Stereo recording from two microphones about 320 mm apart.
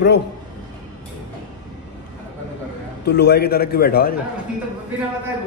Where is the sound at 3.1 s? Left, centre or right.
Left.